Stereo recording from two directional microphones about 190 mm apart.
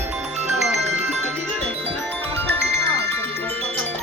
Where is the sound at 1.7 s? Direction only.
30° right (ahead or behind).